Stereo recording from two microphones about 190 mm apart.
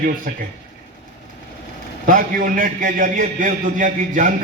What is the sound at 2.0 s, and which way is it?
A man's voice, 50° right (ahead or behind).